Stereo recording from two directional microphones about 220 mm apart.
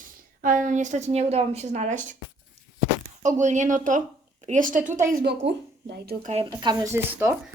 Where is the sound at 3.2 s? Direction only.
35° right (ahead or behind).